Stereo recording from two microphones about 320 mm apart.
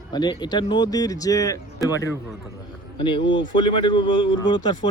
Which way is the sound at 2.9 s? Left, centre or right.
Centre.